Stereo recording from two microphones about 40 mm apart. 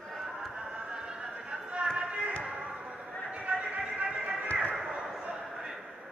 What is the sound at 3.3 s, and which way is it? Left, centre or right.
Music, right.